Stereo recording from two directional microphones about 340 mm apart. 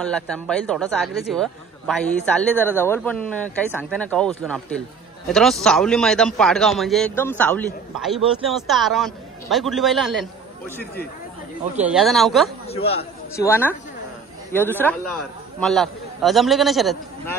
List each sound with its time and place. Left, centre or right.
0.0 s a man's voice: centre
11.7 s a man's voice: centre
12.6 s a man's voice: centre